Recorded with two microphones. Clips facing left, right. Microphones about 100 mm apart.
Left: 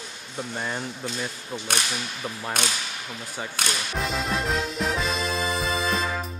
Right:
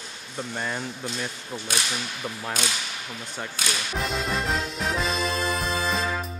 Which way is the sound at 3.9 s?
Centre (ahead or behind).